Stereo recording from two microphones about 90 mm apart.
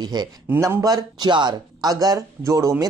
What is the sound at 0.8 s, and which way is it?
Speech, 50° right (ahead or behind).